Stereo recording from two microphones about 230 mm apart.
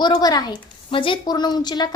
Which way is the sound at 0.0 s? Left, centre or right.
Centre.